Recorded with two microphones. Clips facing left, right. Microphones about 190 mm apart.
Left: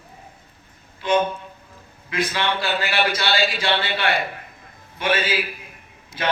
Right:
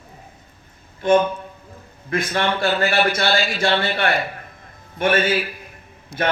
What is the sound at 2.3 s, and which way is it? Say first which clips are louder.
A man's voice: right 6 dB; 50° right (ahead or behind).